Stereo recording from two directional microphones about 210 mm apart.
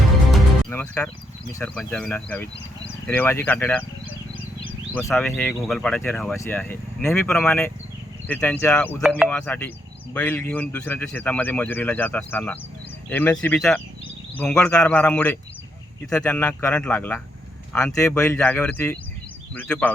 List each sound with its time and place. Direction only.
0.7 s music: 10° left (ahead or behind)
1.5 s speech: 5° left (ahead or behind)
4.9 s speech: 5° left (ahead or behind)
9.0 s speech: 10° right (ahead or behind)
9.3 s speech: 10° left (ahead or behind)